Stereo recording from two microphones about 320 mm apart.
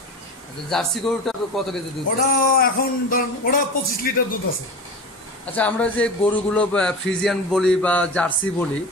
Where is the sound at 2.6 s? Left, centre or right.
Left.